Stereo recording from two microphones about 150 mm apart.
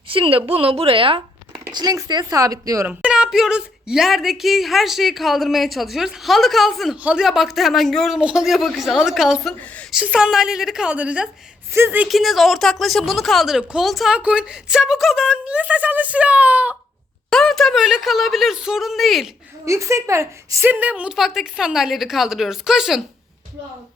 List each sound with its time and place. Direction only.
0.1 s speech: 35° right (ahead or behind)
1.7 s speech: 25° right (ahead or behind)
2.8 s a woman's voice: 5° right (ahead or behind); by 9.9 s 10° left (ahead or behind)
9.9 s a woman's voice: 5° right (ahead or behind)
12.0 s a woman's voice: centre (ahead or behind)
17.2 s a woman's voice: 5° left (ahead or behind)
19.6 s a woman's voice: 20° right (ahead or behind); by 23.0 s 5° right (ahead or behind)